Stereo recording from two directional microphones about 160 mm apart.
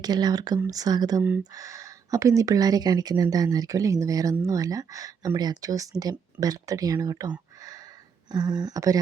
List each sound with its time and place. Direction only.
0.0 s speech: 25° right (ahead or behind)